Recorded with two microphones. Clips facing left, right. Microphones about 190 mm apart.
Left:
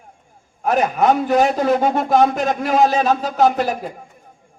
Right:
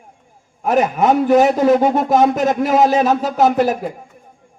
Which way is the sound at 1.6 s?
15° right (ahead or behind).